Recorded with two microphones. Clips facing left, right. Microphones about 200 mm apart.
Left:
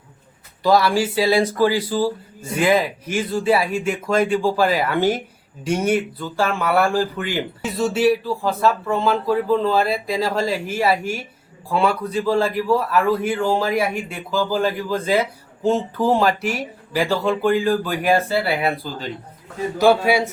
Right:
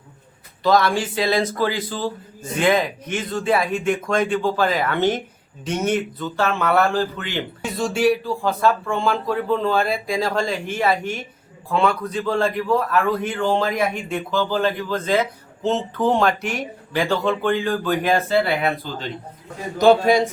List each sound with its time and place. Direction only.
0.6 s a man's voice: 10° left (ahead or behind)